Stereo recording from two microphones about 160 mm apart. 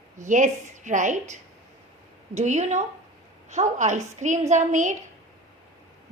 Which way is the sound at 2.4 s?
45° right (ahead or behind).